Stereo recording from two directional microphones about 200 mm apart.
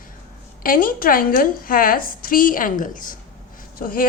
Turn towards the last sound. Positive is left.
turn(degrees=45)  # may be behind; listen again after turning